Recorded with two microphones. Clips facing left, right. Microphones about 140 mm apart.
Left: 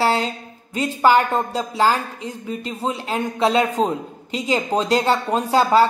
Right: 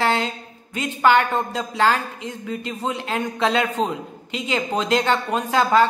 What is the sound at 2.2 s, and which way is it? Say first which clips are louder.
Speech: left 1 dB; 25° left (ahead or behind).